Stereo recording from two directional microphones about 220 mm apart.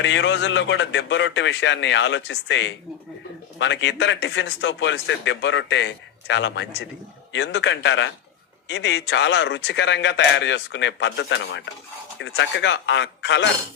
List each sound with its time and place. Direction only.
0.0 s speech: 55° left (ahead or behind)